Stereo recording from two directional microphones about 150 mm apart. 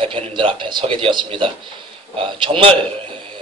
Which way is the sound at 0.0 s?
35° right (ahead or behind).